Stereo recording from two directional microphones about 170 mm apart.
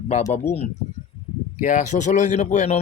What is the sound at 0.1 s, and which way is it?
Speech, 45° left (ahead or behind).